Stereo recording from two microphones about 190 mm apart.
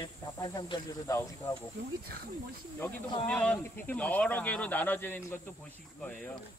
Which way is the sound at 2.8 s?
10° left (ahead or behind).